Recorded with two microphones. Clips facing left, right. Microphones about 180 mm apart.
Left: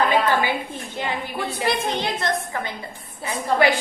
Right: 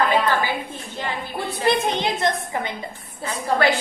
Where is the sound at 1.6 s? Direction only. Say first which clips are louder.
Right 4 dB; 20° right (ahead or behind).